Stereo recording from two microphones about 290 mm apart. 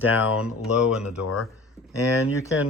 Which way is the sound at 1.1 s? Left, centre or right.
Left.